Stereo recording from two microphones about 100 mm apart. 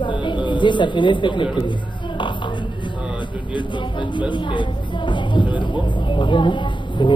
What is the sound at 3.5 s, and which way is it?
Speech, 50° left (ahead or behind).